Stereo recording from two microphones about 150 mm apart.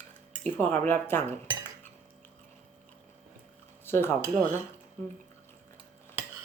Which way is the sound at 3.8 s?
15° left (ahead or behind).